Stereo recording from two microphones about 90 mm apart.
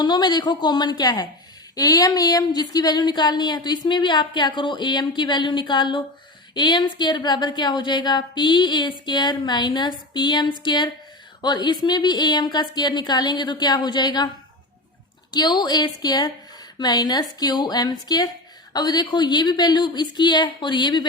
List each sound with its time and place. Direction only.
0.0 s a woman's voice: 50° left (ahead or behind)
15.3 s a woman's voice: 55° left (ahead or behind)